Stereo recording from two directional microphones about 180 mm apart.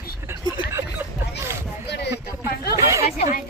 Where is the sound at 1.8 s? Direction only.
65° left (ahead or behind).